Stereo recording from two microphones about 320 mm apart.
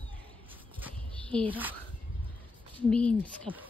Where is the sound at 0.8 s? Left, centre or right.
Centre.